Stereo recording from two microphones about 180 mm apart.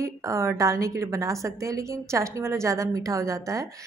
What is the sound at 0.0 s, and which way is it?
A woman's voice, 15° right (ahead or behind).